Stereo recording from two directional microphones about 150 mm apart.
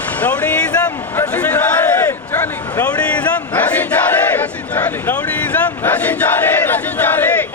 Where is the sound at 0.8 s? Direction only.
25° left (ahead or behind).